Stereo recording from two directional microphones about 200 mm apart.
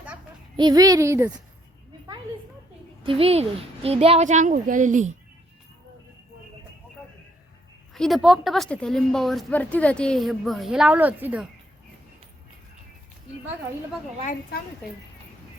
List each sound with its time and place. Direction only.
0.5 s a woman's voice: 20° right (ahead or behind)
3.0 s a woman's voice: 25° right (ahead or behind)
7.9 s a woman's voice: centre (ahead or behind)